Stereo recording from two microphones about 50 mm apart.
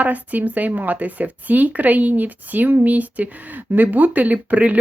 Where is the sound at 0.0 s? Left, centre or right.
Right.